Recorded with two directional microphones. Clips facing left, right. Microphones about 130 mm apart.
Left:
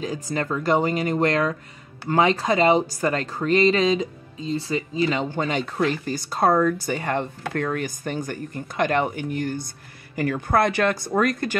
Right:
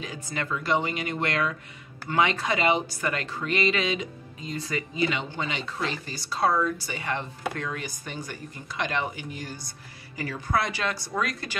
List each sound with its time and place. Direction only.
0.0 s speech: 40° left (ahead or behind)